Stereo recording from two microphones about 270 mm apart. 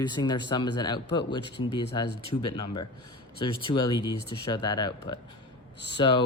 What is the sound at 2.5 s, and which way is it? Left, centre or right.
Speech, centre.